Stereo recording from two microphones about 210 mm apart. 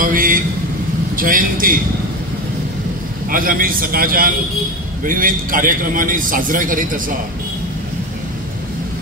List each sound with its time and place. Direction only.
0.0 s a man's voice: 40° right (ahead or behind)
3.3 s a man's voice: 40° right (ahead or behind)